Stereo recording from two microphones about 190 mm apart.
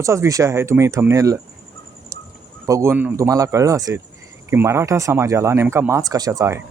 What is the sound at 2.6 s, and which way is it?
Speech, 15° right (ahead or behind).